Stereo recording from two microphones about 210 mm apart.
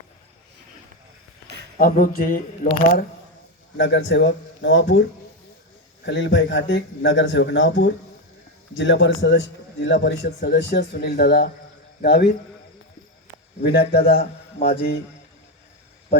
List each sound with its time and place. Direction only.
1.8 s a sound: 40° left (ahead or behind)
3.8 s a man's voice: 60° left (ahead or behind)
6.1 s a man's voice: 55° left (ahead or behind)
13.6 s a man's voice: 45° left (ahead or behind)